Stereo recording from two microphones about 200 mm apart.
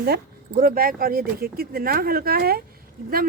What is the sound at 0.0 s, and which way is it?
A woman's voice, 50° right (ahead or behind).